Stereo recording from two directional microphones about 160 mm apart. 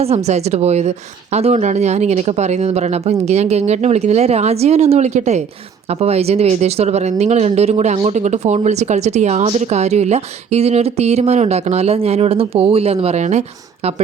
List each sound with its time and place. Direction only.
0.0 s speech: 40° right (ahead or behind)